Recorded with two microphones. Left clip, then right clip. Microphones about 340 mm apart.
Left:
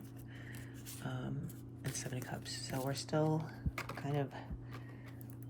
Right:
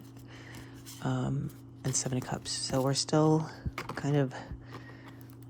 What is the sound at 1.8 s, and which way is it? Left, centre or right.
Speech, centre.